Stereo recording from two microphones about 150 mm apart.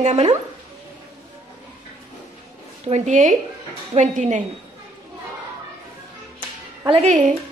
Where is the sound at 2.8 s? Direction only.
50° right (ahead or behind).